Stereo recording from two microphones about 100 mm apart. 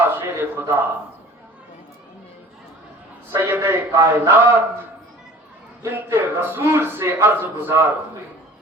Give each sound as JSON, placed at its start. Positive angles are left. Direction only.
{"t": 0.0, "sound": "a man's voice", "side_deg": -20}
{"t": 3.3, "sound": "a man's voice", "side_deg": -25}
{"t": 5.8, "sound": "a man's voice", "side_deg": -25}